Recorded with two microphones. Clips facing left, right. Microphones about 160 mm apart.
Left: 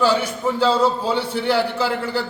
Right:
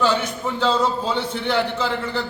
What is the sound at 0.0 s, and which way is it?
A man's voice, 10° left (ahead or behind).